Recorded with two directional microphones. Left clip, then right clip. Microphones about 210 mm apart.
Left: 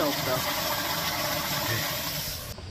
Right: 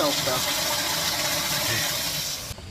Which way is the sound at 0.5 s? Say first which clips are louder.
Right 3 dB; 15° left (ahead or behind).